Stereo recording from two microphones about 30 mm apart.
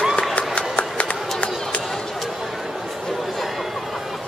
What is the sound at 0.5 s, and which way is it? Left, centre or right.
Run, left.